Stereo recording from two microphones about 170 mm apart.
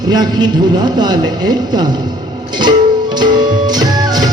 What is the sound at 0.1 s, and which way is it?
A man's voice, 25° right (ahead or behind).